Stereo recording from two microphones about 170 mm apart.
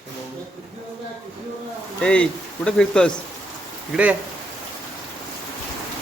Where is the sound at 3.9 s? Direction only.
10° right (ahead or behind).